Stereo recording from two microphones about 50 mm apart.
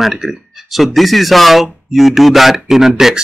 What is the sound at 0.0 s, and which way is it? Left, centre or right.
Speech, centre.